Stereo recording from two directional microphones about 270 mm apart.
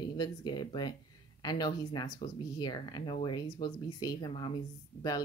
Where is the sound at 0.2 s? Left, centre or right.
Centre.